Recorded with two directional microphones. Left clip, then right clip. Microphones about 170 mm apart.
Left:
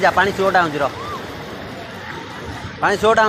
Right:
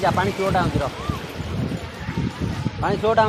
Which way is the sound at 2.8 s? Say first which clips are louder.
Left 4 dB; 15° left (ahead or behind).